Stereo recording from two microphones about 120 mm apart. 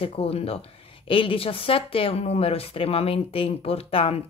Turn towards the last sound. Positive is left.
turn(degrees=55)  # may be behind; listen again after turning